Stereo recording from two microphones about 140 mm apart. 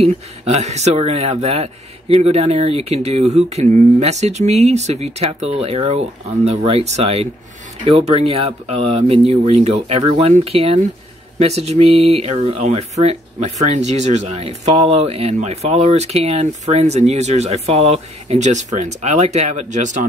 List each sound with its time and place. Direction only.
0.0 s speech: 50° right (ahead or behind)